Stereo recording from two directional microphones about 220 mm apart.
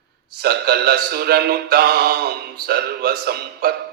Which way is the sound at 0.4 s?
45° right (ahead or behind).